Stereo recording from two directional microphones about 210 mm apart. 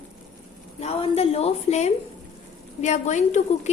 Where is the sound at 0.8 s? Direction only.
30° left (ahead or behind).